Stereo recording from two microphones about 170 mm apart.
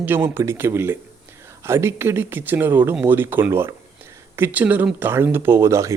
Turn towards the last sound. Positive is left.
turn(degrees=-15)  # may be behind; listen again after turning